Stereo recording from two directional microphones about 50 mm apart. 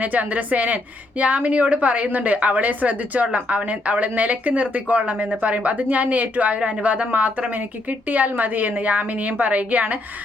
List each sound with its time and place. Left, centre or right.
0.0 s a woman's voice: right